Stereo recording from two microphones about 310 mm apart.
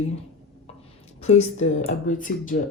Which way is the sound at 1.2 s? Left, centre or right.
Left.